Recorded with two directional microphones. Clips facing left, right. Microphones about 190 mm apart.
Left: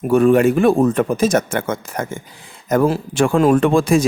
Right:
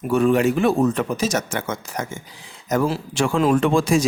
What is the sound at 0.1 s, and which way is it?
Speech, 55° left (ahead or behind).